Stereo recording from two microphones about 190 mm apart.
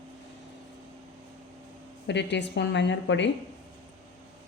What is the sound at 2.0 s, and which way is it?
A woman's voice, 65° left (ahead or behind).